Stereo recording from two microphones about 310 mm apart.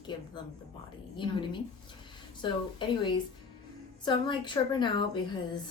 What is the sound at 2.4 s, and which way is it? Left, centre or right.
A woman's voice, centre.